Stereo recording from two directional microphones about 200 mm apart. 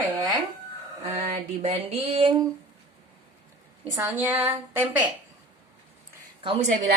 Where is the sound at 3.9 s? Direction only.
10° right (ahead or behind).